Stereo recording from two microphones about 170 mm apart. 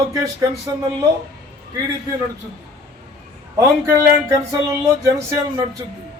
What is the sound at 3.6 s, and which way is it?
Speech, 20° right (ahead or behind).